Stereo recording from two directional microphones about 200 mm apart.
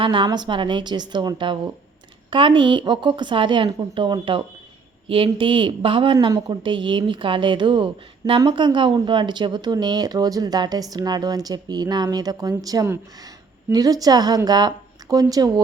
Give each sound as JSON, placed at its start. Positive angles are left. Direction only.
{"t": 0.0, "sound": "a woman's voice", "side_deg": -25}